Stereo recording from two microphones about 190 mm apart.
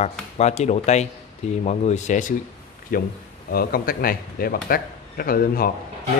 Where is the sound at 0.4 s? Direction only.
35° left (ahead or behind).